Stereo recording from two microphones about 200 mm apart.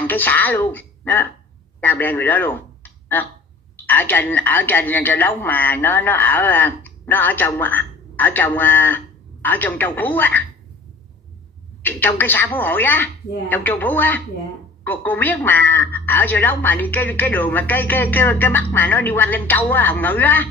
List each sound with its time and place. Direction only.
0.0 s a woman's voice: 10° left (ahead or behind)
11.8 s a woman's voice: 10° left (ahead or behind)